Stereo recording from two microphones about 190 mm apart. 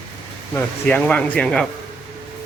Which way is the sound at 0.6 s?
10° left (ahead or behind).